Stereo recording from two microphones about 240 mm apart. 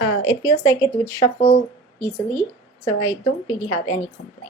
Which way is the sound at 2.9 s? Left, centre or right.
Left.